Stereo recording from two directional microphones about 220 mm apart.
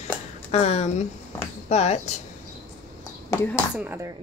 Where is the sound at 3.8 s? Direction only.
10° right (ahead or behind).